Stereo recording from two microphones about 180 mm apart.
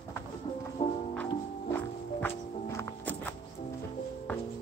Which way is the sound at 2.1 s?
15° left (ahead or behind).